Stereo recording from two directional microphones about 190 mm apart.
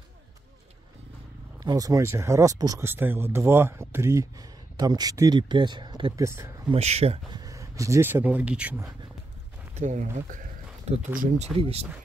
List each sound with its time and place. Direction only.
1.6 s speech: 20° right (ahead or behind)
6.7 s speech: 35° right (ahead or behind)
7.3 s speech: 20° right (ahead or behind)
9.8 s speech: 40° right (ahead or behind)